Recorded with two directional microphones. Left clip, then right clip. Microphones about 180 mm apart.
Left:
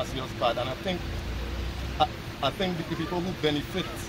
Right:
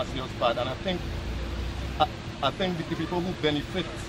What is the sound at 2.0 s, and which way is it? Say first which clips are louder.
Speech: even; 20° left (ahead or behind).